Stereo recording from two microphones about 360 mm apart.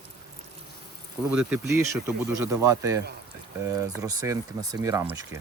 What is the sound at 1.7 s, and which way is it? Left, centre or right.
Speech, centre.